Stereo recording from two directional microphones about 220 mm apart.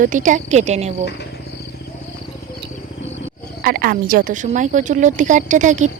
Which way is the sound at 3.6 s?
40° right (ahead or behind).